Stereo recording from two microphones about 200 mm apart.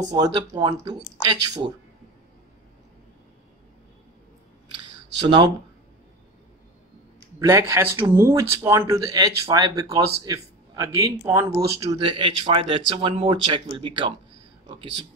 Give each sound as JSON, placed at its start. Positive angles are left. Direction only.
{"t": 0.0, "sound": "speech", "side_deg": -20}
{"t": 7.3, "sound": "speech", "side_deg": -15}